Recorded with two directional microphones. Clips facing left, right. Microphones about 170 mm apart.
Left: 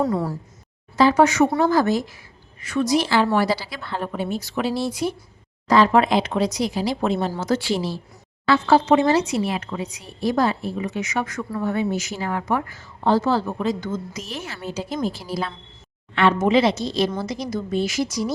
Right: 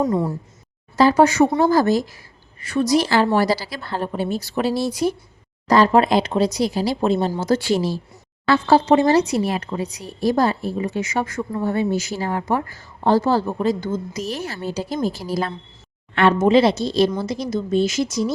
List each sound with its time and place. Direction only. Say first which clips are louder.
0.0 s speech: right 2 dB; 20° right (ahead or behind)
0.9 s a woman's voice: right 2 dB; 35° right (ahead or behind)
7.6 s a woman's voice: right 4 dB; 45° right (ahead or behind)
16.4 s a woman's voice: right 3 dB; 30° right (ahead or behind)